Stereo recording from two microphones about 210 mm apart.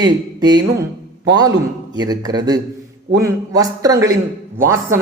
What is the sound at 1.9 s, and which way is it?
Speech, 20° right (ahead or behind).